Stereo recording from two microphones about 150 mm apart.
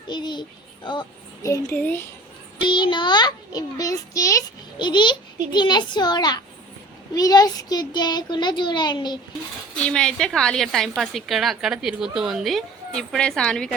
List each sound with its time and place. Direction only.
0.1 s a child's voice: 30° left (ahead or behind)
1.5 s speech: 15° left (ahead or behind)
2.6 s a child's voice: 30° left (ahead or behind)
9.7 s a woman's voice: 5° left (ahead or behind)